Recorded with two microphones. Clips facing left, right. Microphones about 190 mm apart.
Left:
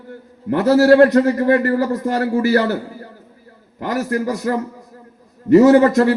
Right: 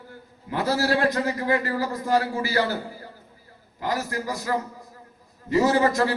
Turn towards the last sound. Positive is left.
turn(degrees=65)  # may be behind; listen again after turning